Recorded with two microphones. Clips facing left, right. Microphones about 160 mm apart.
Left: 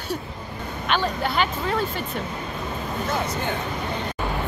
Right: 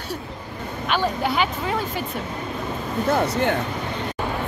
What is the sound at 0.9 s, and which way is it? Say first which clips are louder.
Speech: right 2 dB; 10° right (ahead or behind).